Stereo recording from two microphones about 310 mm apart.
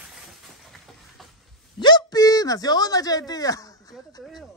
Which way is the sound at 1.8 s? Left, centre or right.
Centre.